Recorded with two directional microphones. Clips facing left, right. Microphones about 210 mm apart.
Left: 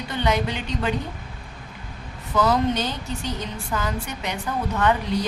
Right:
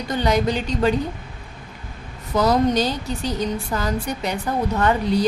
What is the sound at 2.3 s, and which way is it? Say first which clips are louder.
A woman's voice: right 3 dB; 40° right (ahead or behind).